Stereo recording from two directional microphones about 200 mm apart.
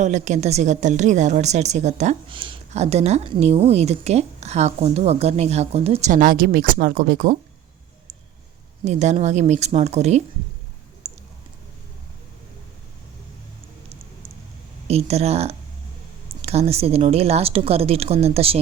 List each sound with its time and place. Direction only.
0.0 s a woman's voice: 35° right (ahead or behind)
8.8 s a woman's voice: 35° right (ahead or behind)
11.0 s a sound: 30° right (ahead or behind)
14.8 s a woman's voice: 30° right (ahead or behind)